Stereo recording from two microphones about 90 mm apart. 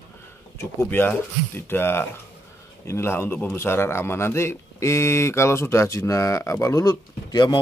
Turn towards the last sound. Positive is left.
turn(degrees=50)  # may be behind; listen again after turning